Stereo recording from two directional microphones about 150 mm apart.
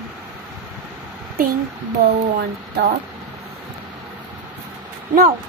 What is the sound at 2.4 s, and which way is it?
Speech, 90° right.